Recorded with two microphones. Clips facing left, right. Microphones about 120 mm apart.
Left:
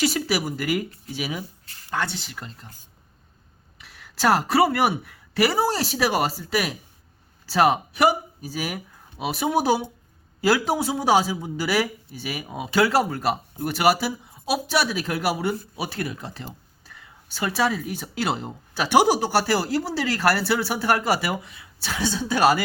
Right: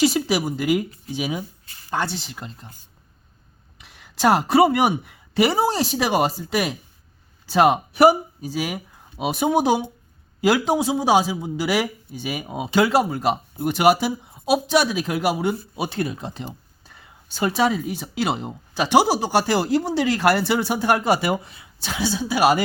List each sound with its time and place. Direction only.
0.0 s speech: 25° right (ahead or behind)
4.4 s speech: 20° right (ahead or behind)
7.5 s speech: 20° right (ahead or behind)